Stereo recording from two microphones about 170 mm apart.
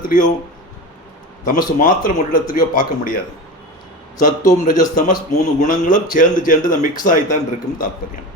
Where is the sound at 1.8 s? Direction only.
50° left (ahead or behind).